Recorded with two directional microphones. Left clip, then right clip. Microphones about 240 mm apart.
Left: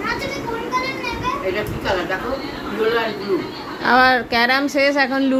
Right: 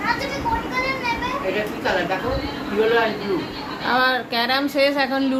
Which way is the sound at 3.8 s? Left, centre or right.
Left.